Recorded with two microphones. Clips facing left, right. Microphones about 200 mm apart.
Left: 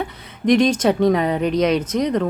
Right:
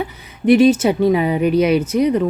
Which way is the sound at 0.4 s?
5° right (ahead or behind).